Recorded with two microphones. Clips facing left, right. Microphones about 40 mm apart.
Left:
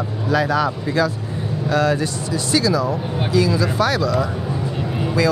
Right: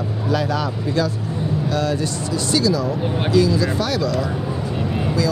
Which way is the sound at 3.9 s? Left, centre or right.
Centre.